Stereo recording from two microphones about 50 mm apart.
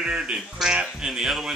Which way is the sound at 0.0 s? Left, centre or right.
Centre.